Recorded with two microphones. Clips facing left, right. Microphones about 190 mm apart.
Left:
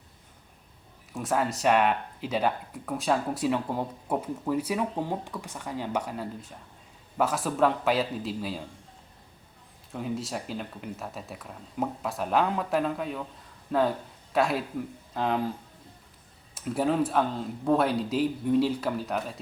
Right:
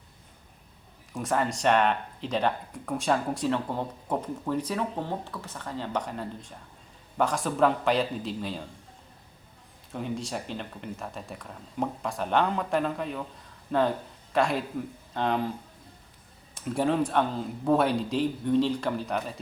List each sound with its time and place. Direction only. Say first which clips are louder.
1.1 s speech: even; centre (ahead or behind)
9.9 s speech: even; centre (ahead or behind)
16.6 s speech: even; 5° left (ahead or behind)